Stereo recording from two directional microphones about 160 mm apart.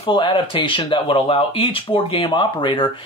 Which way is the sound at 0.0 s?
30° left (ahead or behind).